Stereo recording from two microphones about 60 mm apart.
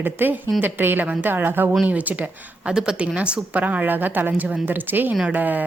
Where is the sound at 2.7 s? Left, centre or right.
Centre.